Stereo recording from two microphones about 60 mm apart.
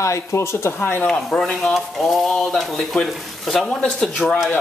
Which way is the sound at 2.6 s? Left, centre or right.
Centre.